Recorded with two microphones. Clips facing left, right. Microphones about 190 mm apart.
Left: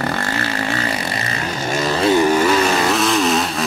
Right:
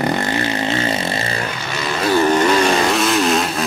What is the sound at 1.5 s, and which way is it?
Vehicle, 45° left (ahead or behind).